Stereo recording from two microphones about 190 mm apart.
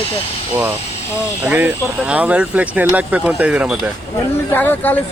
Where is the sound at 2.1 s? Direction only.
5° right (ahead or behind).